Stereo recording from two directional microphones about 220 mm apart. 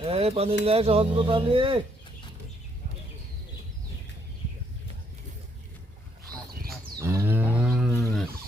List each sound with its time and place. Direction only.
0.0 s speech: 25° right (ahead or behind)
7.0 s livestock: 10° right (ahead or behind)